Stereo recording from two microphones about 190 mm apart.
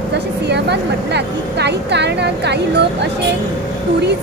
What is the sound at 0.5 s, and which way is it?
Speech, 60° right (ahead or behind).